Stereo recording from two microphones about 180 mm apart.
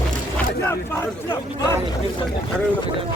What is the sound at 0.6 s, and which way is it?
Speech, 10° left (ahead or behind).